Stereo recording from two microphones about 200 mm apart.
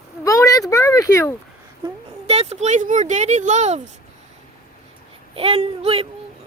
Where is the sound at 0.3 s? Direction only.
15° left (ahead or behind).